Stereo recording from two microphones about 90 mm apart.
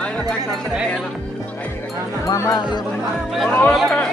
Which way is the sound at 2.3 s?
40° left (ahead or behind).